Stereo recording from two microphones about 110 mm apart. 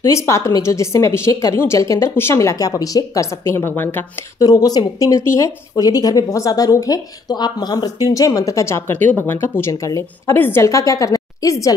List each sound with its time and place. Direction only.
0.0 s a woman's voice: 25° left (ahead or behind)
4.4 s a woman's voice: 35° left (ahead or behind)